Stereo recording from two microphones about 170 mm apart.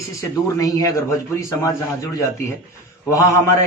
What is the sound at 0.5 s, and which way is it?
A man's voice, 20° left (ahead or behind).